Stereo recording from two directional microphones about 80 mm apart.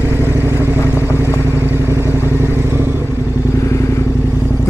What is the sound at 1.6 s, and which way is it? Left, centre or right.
Vehicle, right.